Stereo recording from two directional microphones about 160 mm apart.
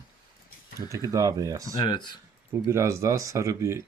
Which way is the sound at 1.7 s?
25° left (ahead or behind).